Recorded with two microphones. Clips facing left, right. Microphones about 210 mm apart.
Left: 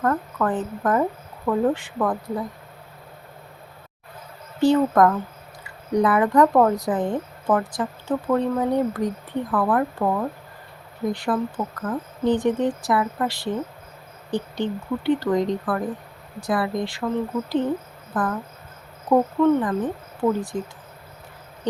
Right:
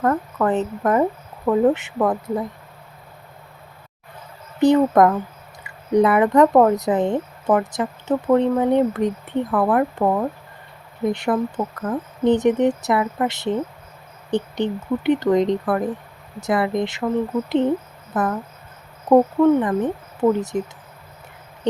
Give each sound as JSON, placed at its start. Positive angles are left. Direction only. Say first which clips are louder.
{"t": 0.0, "sound": "speech", "louder": "right 3 dB", "side_deg": -25}
{"t": 4.6, "sound": "speech", "louder": "right 3 dB", "side_deg": -20}
{"t": 18.1, "sound": "speech", "louder": "right 3 dB", "side_deg": -25}